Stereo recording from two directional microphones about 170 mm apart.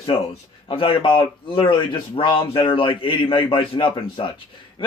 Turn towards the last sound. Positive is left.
turn(degrees=30)  # may be behind; listen again after turning